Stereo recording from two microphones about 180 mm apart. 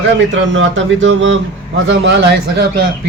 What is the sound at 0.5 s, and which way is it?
Speech, 90° right.